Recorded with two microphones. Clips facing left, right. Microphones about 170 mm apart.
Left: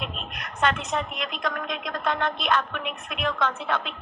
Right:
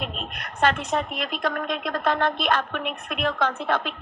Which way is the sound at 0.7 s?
45° right (ahead or behind).